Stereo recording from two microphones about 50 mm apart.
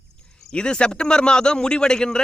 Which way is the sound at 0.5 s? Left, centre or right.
Centre.